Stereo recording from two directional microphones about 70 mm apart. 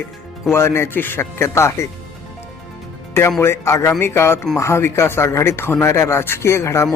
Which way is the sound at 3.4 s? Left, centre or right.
Left.